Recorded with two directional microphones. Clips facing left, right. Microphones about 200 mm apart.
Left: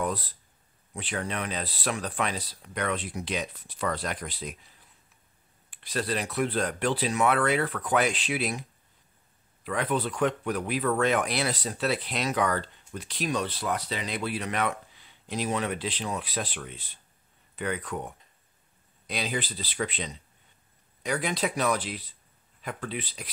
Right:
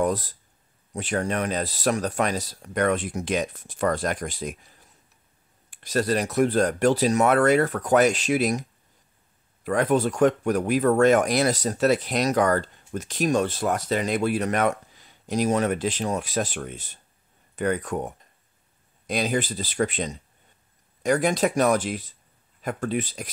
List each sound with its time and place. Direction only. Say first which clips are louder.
0.0 s speech: right 6 dB; 45° right (ahead or behind)